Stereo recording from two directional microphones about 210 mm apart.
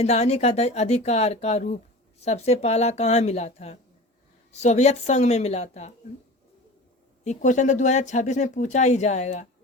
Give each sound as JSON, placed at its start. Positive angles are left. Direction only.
{"t": 0.0, "sound": "speech", "side_deg": 30}
{"t": 7.3, "sound": "speech", "side_deg": 35}